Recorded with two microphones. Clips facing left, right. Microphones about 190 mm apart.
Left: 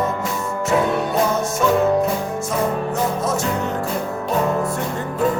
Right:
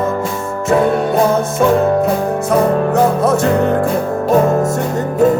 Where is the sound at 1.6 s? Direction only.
50° right (ahead or behind).